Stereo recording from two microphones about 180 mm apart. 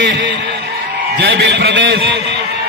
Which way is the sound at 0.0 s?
90° right.